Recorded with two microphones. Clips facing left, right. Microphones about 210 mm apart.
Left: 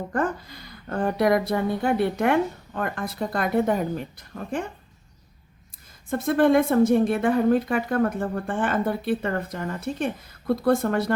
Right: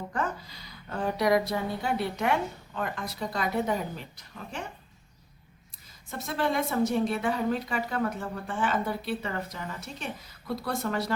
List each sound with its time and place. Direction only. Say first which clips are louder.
0.1 s a woman's voice: left 8 dB; 50° left (ahead or behind)
6.1 s a woman's voice: left 10 dB; 55° left (ahead or behind)